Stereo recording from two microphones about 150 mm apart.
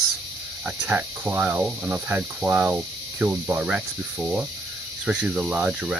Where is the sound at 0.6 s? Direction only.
10° right (ahead or behind).